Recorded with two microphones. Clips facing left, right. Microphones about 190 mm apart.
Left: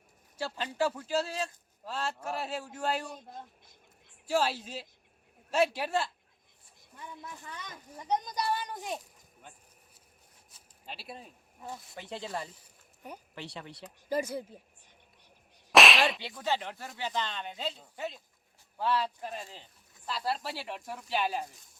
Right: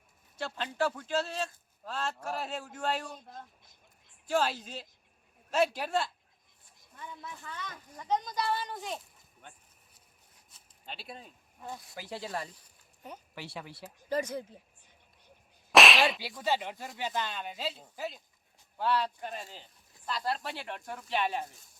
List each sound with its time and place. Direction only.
0.3 s a man's voice: 10° left (ahead or behind)
4.3 s speech: 5° left (ahead or behind)
7.3 s a man's voice: 15° left (ahead or behind)
10.5 s a sound: 5° left (ahead or behind)
11.8 s speech: centre (ahead or behind)
14.1 s a man's voice: 10° left (ahead or behind)
15.7 s whip: centre (ahead or behind)
16.4 s speech: 10° right (ahead or behind)